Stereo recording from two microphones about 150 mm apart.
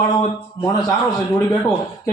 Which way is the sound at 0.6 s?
25° left (ahead or behind).